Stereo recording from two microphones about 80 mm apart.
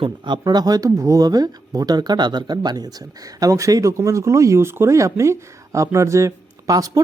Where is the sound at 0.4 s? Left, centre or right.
Right.